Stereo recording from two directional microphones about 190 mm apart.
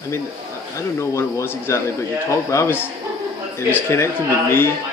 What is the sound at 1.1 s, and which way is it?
A man's voice, 15° left (ahead or behind).